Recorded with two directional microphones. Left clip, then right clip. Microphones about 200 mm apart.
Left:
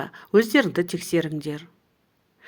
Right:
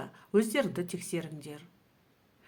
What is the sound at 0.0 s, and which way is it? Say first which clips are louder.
Speech: left 9 dB; 35° left (ahead or behind).